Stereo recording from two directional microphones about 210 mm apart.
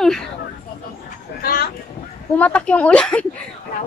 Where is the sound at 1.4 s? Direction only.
45° left (ahead or behind).